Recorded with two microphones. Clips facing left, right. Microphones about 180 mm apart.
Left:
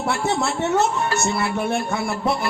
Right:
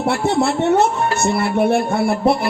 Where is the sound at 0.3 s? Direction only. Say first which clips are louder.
Right 8 dB; 60° right (ahead or behind).